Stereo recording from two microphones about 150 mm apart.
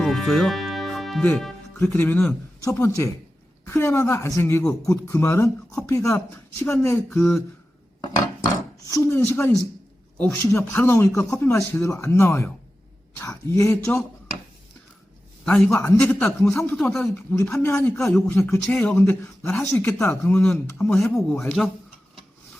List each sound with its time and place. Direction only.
0.0 s speech: centre (ahead or behind); by 7.3 s 15° left (ahead or behind)
8.9 s speech: 20° left (ahead or behind)
13.5 s speech: 20° left (ahead or behind)
15.4 s speech: 10° left (ahead or behind)
16.7 s speech: 5° left (ahead or behind)
17.5 s speech: 20° left (ahead or behind)
21.1 s speech: 5° left (ahead or behind)